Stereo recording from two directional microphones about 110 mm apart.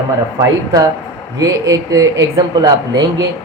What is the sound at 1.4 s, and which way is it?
Speech, 30° right (ahead or behind).